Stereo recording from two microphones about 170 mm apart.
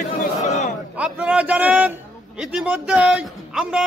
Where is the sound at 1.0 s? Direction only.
5° right (ahead or behind).